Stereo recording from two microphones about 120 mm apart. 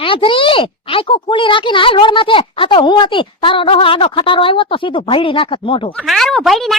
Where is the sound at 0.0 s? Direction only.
45° left (ahead or behind).